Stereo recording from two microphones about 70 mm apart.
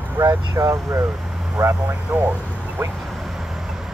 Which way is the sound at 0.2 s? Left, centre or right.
Right.